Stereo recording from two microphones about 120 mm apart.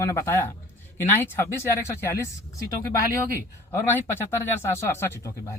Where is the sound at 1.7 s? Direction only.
20° left (ahead or behind).